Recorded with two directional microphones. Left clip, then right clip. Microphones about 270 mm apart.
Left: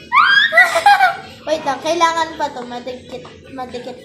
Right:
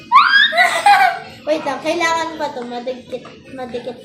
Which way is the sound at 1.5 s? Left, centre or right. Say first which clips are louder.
Even; left.